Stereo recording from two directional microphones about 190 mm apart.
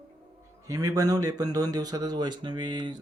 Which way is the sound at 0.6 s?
20° right (ahead or behind).